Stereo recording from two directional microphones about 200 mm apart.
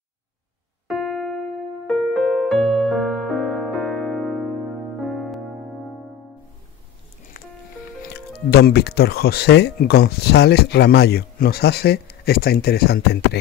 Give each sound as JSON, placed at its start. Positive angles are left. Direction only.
{"t": 0.8, "sound": "keyboard", "side_deg": 0}
{"t": 1.9, "sound": "music", "side_deg": 0}
{"t": 7.3, "sound": "music", "side_deg": 45}
{"t": 8.1, "sound": "speech", "side_deg": 55}